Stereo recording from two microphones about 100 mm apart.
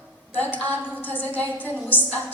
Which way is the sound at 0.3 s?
15° left (ahead or behind).